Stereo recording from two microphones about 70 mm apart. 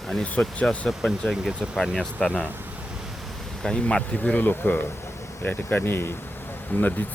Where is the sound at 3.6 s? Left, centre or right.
Centre.